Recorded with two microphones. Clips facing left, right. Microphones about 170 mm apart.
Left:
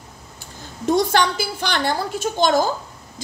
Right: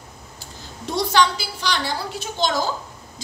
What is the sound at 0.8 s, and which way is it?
A woman's voice, 50° left (ahead or behind).